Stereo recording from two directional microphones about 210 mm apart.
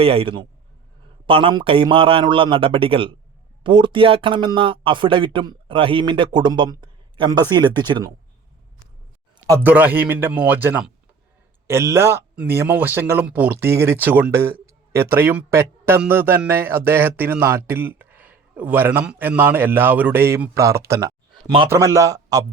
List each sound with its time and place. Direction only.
0.0 s speech: 25° right (ahead or behind)
9.5 s a man's voice: 10° right (ahead or behind)